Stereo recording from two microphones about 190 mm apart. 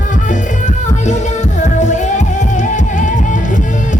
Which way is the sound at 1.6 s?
40° left (ahead or behind).